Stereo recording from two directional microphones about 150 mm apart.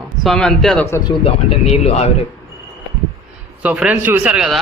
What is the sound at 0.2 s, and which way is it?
Speech, 5° left (ahead or behind).